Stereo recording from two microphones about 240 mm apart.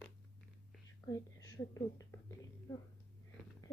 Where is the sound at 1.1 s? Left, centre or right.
Centre.